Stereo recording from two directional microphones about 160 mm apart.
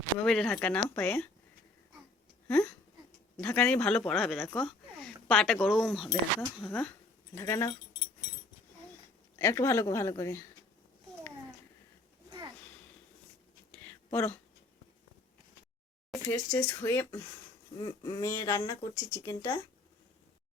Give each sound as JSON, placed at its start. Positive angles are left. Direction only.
{"t": 0.3, "sound": "speech", "side_deg": 5}
{"t": 2.5, "sound": "speech", "side_deg": 15}
{"t": 7.3, "sound": "a woman's voice", "side_deg": 20}
{"t": 9.3, "sound": "a woman's voice", "side_deg": 20}
{"t": 13.8, "sound": "a sound", "side_deg": 15}
{"t": 16.1, "sound": "a woman's voice", "side_deg": 20}